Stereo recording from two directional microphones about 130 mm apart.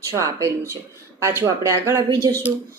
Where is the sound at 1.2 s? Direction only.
20° right (ahead or behind).